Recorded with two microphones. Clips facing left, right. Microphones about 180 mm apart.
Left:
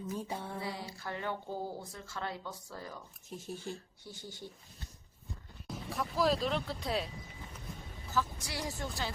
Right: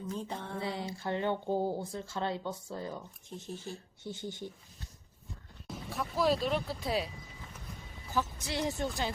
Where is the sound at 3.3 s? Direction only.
10° left (ahead or behind).